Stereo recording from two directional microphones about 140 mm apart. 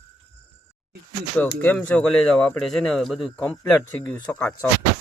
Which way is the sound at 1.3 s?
15° left (ahead or behind).